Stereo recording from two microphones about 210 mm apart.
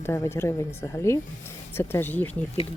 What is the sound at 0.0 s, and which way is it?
Speech, 10° left (ahead or behind).